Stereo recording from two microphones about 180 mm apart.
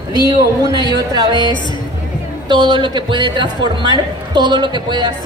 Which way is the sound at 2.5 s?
25° right (ahead or behind).